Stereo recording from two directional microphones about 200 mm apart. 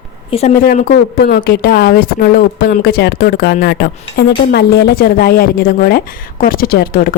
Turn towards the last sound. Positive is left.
turn(degrees=45)  # may be behind; listen again after turning